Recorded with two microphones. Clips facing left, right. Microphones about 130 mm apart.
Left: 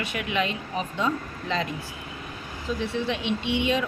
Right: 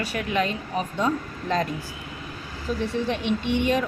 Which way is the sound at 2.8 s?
45° right (ahead or behind).